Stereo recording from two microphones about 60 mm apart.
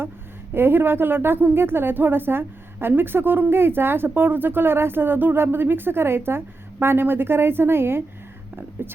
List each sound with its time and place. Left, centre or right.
0.5 s a woman's voice: right